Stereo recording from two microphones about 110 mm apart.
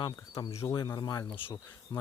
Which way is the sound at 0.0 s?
40° left (ahead or behind).